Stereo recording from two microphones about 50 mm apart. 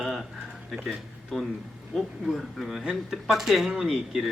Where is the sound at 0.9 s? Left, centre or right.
Centre.